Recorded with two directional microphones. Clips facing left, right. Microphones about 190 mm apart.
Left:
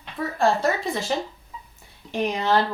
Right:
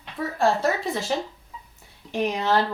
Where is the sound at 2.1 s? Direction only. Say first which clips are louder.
Left 1 dB; 5° right (ahead or behind).